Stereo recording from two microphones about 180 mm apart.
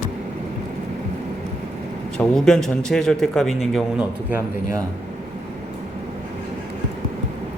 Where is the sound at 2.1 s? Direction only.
5° left (ahead or behind).